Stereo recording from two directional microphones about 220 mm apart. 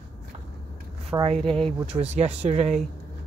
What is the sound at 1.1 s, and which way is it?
Speech, 25° right (ahead or behind).